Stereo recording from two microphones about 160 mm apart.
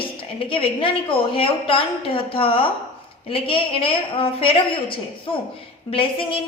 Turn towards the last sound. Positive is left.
turn(degrees=35)  # may be behind; listen again after turning